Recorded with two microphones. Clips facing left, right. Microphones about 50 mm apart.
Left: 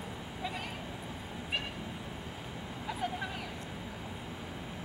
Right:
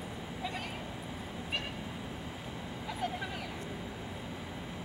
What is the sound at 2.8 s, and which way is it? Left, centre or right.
Vehicle, centre.